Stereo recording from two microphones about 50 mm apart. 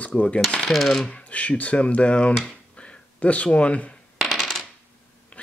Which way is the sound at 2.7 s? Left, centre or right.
Left.